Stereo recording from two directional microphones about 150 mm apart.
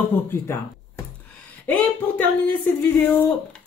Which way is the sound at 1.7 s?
10° left (ahead or behind).